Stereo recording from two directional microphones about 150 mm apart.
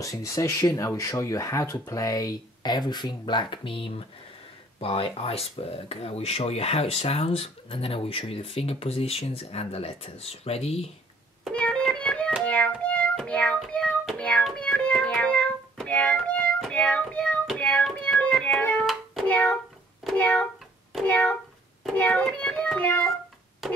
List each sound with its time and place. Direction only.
0.0 s speech: 20° left (ahead or behind); by 10.9 s 45° left (ahead or behind)
11.4 s music: 5° left (ahead or behind)
20.1 s a sound: 5° left (ahead or behind)
20.9 s cat: 10° left (ahead or behind)
21.8 s a child's voice: 10° left (ahead or behind)
23.6 s music: centre (ahead or behind)